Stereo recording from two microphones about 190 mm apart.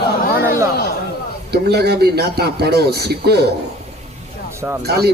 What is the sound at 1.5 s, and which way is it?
Speech, 60° right (ahead or behind).